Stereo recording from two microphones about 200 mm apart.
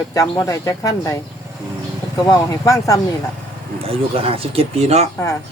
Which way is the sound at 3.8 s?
30° right (ahead or behind).